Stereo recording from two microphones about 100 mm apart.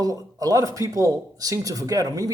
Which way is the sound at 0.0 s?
40° right (ahead or behind).